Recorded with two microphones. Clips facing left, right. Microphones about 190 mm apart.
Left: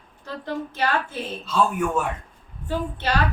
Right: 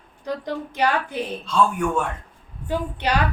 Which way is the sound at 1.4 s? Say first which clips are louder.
Right 1 dB; 5° left (ahead or behind).